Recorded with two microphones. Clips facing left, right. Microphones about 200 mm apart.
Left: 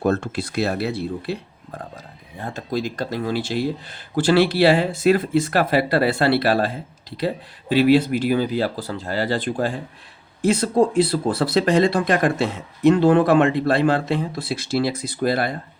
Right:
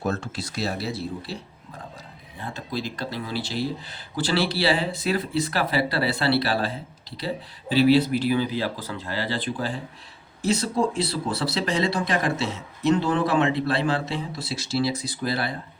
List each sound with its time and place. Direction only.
0.0 s speech: 60° left (ahead or behind)
2.4 s speech: 45° left (ahead or behind)
7.8 s speech: 50° left (ahead or behind)